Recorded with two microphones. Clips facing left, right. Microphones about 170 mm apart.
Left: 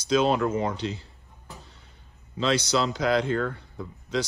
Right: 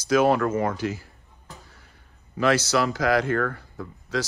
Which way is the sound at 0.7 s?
25° left (ahead or behind).